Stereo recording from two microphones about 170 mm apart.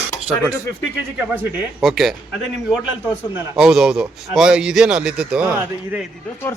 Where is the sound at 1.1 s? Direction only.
10° right (ahead or behind).